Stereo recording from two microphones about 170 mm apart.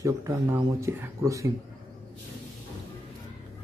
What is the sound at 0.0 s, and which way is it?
Speech, 20° right (ahead or behind).